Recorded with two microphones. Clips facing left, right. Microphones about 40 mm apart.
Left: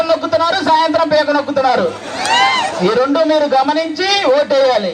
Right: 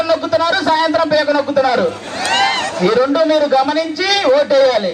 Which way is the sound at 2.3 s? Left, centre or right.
Left.